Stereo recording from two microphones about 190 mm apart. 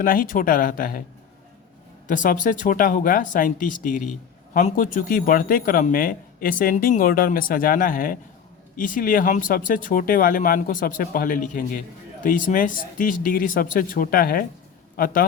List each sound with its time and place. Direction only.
0.0 s a man's voice: 45° left (ahead or behind)
2.0 s a man's voice: 45° left (ahead or behind)